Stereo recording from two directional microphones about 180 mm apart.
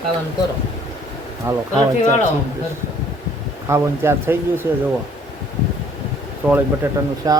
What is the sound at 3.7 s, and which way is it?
A man's voice, 15° right (ahead or behind).